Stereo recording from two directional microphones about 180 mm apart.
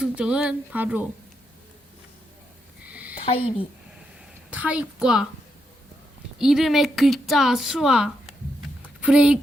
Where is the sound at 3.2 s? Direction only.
30° left (ahead or behind).